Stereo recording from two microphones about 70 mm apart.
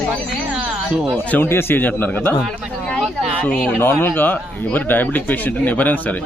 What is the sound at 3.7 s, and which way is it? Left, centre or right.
A man's voice, left.